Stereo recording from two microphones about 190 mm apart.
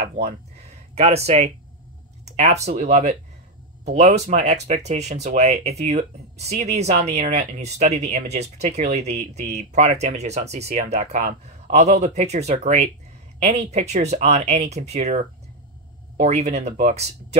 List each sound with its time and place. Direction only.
0.9 s speech: 35° right (ahead or behind)